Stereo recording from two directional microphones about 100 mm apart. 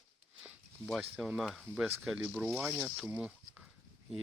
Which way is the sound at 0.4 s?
10° right (ahead or behind).